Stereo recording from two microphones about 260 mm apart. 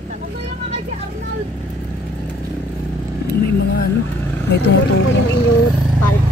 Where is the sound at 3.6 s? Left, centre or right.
Left.